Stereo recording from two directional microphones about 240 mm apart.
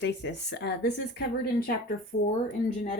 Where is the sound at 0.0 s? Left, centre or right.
Left.